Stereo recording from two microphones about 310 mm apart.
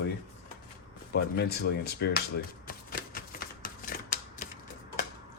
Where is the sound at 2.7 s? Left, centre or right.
Left.